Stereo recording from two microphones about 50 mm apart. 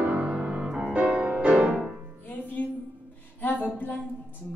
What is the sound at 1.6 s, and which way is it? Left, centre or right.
Music, centre.